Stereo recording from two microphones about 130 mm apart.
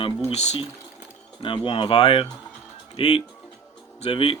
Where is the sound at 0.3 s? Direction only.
55° left (ahead or behind).